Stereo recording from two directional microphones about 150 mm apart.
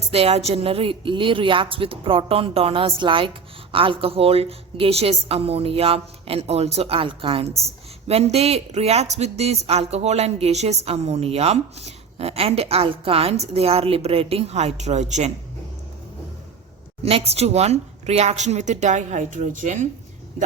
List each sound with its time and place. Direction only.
0.1 s speech: 40° right (ahead or behind)
17.0 s speech: 40° right (ahead or behind)